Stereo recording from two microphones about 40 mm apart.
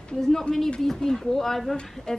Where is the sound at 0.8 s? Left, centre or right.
Centre.